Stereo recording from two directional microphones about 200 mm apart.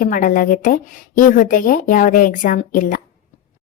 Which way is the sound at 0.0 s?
40° left (ahead or behind).